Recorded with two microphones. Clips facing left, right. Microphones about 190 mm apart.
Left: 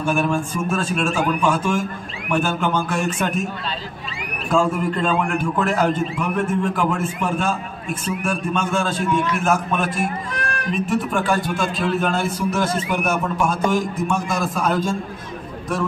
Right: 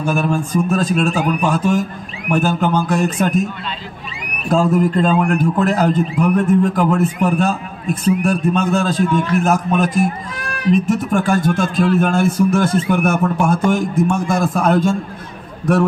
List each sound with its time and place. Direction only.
0.0 s a man's voice: 40° right (ahead or behind)
4.5 s a man's voice: 40° right (ahead or behind); by 15.0 s 60° right (ahead or behind)